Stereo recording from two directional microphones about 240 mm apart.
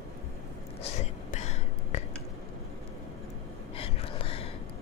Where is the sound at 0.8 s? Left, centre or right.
Left.